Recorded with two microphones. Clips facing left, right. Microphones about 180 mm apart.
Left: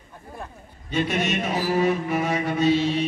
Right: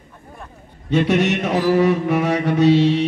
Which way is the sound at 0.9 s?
70° right (ahead or behind).